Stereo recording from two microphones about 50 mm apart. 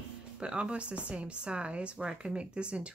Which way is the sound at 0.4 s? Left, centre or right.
Right.